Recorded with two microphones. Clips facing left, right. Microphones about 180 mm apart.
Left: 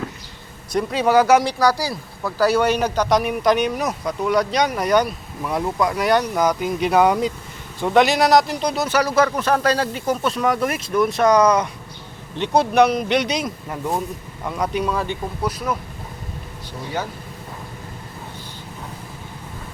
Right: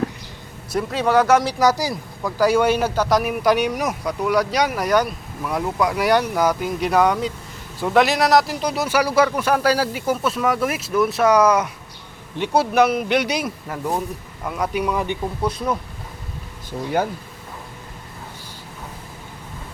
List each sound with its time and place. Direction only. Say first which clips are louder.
0.7 s speech: left 1 dB; centre (ahead or behind)
1.5 s speech: right 1 dB; 20° right (ahead or behind)